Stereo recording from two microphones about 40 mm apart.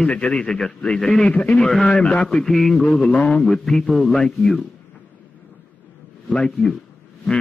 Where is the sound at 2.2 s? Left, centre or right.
Centre.